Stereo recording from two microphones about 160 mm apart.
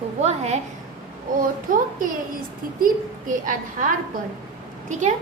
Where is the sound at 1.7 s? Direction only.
55° right (ahead or behind).